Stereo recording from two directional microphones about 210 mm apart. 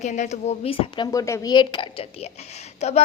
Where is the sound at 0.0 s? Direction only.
35° left (ahead or behind).